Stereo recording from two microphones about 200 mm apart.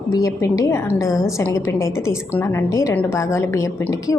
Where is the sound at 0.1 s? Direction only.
15° left (ahead or behind).